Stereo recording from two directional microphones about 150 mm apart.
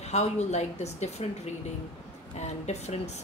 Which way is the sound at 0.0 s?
50° left (ahead or behind).